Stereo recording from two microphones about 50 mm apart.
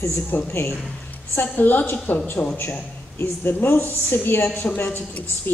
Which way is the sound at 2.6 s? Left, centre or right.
Left.